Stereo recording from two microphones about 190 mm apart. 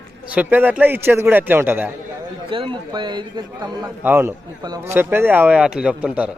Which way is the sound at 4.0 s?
10° right (ahead or behind).